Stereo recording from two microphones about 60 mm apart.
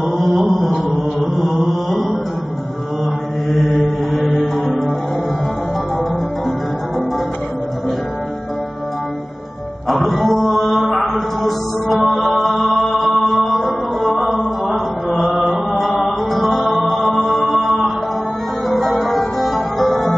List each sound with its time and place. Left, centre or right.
0.3 s music: centre
4.1 s music: centre
9.8 s mantra: centre
15.5 s music: centre